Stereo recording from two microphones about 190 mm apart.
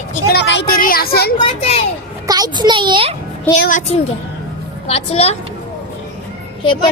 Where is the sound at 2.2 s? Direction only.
20° right (ahead or behind).